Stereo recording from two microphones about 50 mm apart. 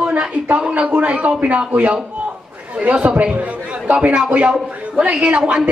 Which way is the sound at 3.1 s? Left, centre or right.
Right.